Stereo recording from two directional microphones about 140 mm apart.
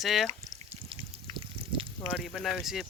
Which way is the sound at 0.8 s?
40° right (ahead or behind).